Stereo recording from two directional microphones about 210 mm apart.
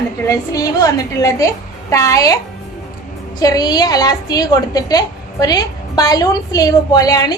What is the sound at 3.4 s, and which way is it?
A woman's voice, 15° left (ahead or behind).